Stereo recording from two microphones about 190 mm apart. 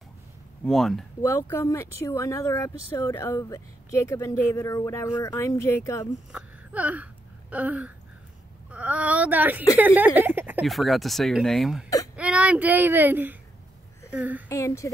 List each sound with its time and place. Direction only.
0.7 s speech: centre (ahead or behind)
1.2 s speech: 15° left (ahead or behind)
6.3 s whimper: 5° right (ahead or behind)
7.5 s a sound: 5° right (ahead or behind)
8.6 s speech: 5° right (ahead or behind)
14.1 s a sound: 10° right (ahead or behind)
14.5 s speech: 15° left (ahead or behind)